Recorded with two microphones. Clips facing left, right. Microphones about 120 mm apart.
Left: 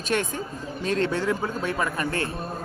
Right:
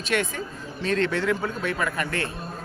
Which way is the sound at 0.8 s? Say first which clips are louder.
Right 1 dB; 40° left (ahead or behind).